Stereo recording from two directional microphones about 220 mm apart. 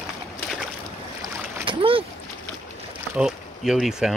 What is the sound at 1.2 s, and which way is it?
Boat, 20° right (ahead or behind).